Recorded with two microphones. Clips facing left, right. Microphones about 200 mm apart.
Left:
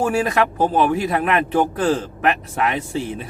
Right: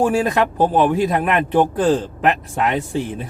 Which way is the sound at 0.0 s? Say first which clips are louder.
Right 2 dB; 15° right (ahead or behind).